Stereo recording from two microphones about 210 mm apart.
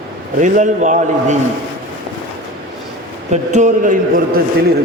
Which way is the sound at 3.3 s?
35° right (ahead or behind).